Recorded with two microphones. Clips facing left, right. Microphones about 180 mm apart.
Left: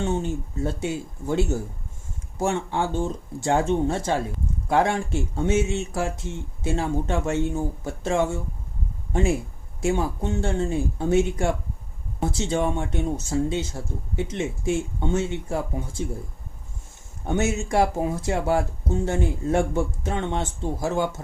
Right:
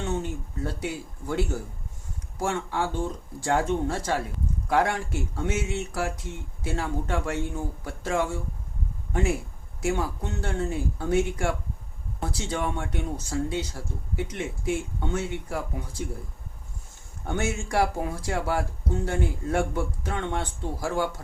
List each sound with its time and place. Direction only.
0.0 s speech: 25° left (ahead or behind)
17.2 s speech: 25° left (ahead or behind)